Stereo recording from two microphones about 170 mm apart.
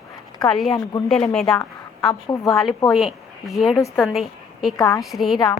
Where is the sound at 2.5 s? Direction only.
Centre (ahead or behind).